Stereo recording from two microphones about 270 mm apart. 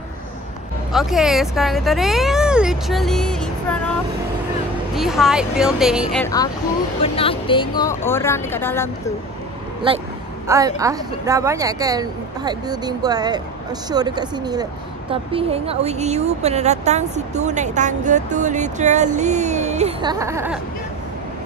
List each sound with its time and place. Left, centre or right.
0.9 s speech: centre
4.9 s speech: centre
6.2 s a woman's voice: centre
10.5 s a woman's voice: centre